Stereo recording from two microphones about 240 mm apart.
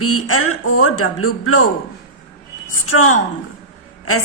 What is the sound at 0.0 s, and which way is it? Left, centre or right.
A woman's voice, left.